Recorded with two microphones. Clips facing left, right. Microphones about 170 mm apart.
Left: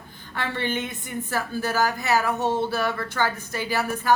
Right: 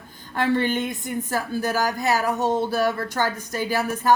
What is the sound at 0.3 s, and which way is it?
A woman's voice, 45° right (ahead or behind).